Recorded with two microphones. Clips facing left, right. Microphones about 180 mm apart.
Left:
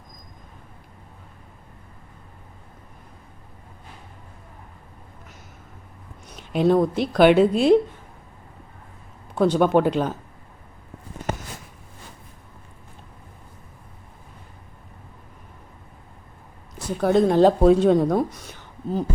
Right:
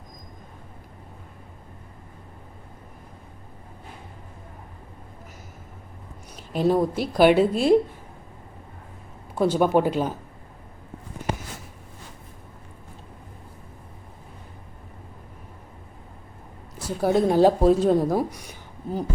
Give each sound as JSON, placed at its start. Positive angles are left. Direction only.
{"t": 6.3, "sound": "speech", "side_deg": -5}
{"t": 9.4, "sound": "speech", "side_deg": -5}
{"t": 16.7, "sound": "speech", "side_deg": -5}